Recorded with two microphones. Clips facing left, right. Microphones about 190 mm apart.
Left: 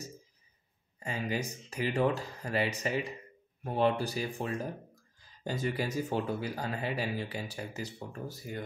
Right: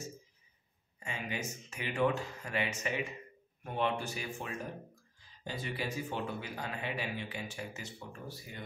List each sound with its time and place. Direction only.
0.9 s speech: 35° left (ahead or behind)